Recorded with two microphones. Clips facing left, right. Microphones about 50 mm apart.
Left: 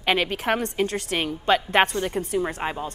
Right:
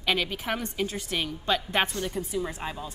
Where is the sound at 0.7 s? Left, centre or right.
Left.